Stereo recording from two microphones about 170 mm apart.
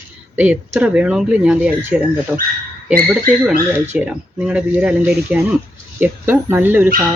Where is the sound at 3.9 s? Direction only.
5° right (ahead or behind).